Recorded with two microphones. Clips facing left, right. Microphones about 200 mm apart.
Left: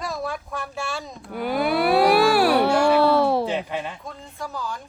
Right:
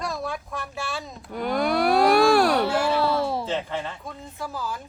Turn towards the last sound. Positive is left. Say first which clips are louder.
# even
turn(degrees=-5)  # may be behind; listen again after turning